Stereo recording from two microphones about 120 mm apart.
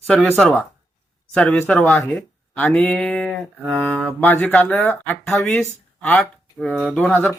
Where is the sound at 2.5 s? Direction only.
15° left (ahead or behind).